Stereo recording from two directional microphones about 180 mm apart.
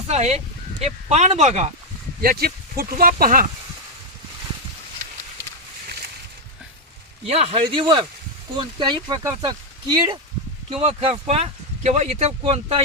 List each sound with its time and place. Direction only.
0.1 s speech: 35° right (ahead or behind)
2.2 s speech: 55° right (ahead or behind)
7.3 s speech: 35° right (ahead or behind)